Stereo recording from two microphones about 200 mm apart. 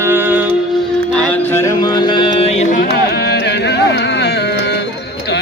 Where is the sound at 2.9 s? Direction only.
55° left (ahead or behind).